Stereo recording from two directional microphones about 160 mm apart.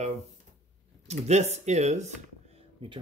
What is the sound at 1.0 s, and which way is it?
Speech, 45° right (ahead or behind).